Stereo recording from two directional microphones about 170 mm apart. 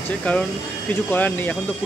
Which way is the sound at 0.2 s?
5° left (ahead or behind).